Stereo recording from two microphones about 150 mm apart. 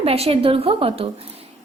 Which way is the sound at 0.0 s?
40° right (ahead or behind).